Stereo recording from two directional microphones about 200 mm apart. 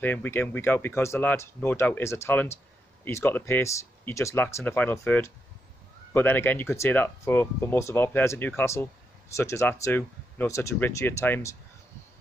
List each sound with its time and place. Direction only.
0.0 s speech: 10° left (ahead or behind)